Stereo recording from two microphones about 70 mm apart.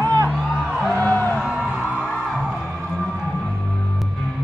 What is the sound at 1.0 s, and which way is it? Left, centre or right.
Music, left.